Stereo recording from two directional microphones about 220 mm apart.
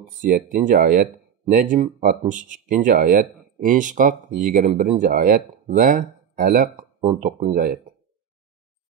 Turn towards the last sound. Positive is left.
turn(degrees=-35)  # may be behind; listen again after turning